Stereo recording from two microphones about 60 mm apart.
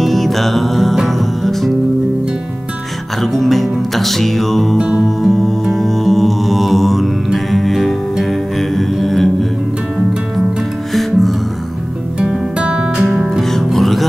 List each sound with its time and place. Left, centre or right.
0.0 s music: centre
3.2 s music: centre
4.7 s music: centre
5.0 s music: centre
10.9 s music: centre
12.5 s music: centre